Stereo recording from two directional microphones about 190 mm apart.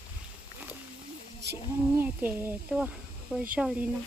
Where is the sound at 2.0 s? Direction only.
10° right (ahead or behind).